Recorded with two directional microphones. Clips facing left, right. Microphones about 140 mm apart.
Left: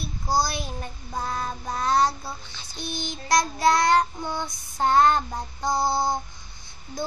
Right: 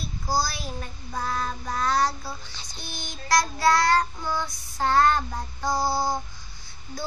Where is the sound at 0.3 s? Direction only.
20° left (ahead or behind).